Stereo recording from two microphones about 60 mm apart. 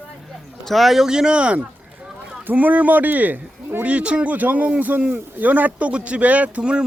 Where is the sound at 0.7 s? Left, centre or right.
Centre.